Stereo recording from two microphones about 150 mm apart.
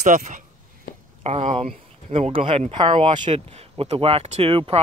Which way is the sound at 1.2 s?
45° right (ahead or behind).